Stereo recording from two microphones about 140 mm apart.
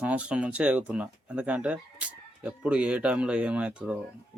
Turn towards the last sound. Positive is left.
turn(degrees=-10)  # may be behind; listen again after turning